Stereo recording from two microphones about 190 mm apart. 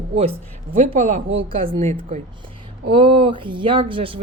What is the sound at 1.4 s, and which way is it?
Speech, 30° right (ahead or behind).